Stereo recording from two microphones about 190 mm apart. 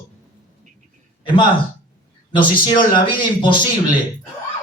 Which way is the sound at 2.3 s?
25° left (ahead or behind).